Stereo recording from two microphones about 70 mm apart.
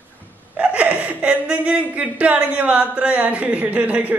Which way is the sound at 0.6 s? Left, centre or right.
Centre.